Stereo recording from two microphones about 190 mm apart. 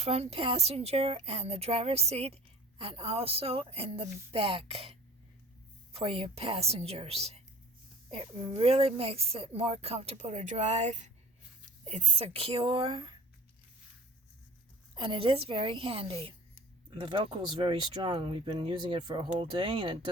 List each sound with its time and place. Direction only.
0.0 s a woman's voice: 35° right (ahead or behind)
14.9 s speech: 25° right (ahead or behind)